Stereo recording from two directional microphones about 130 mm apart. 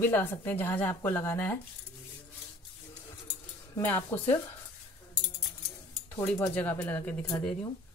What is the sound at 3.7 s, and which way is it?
Speech, 15° left (ahead or behind).